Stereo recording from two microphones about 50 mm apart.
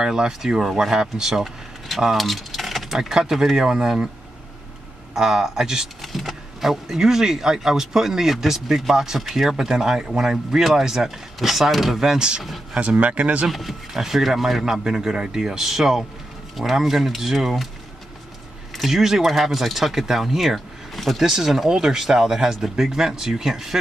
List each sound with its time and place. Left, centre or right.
0.0 s speech: centre
5.1 s speech: centre
12.7 s speech: right
13.5 s speech: centre
18.8 s speech: centre